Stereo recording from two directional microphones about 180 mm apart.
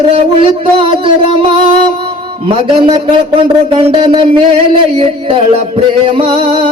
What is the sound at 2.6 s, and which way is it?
Speech, 25° right (ahead or behind).